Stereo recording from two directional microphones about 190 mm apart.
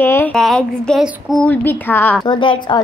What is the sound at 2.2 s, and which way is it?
Speech, 25° left (ahead or behind).